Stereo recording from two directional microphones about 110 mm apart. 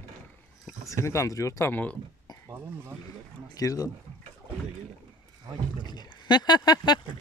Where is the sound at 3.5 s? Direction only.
35° left (ahead or behind).